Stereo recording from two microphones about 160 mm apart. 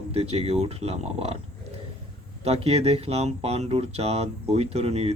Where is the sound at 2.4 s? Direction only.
40° right (ahead or behind).